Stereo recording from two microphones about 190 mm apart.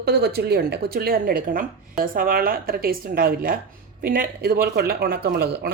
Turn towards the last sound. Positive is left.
turn(degrees=-60)  # may be behind; listen again after turning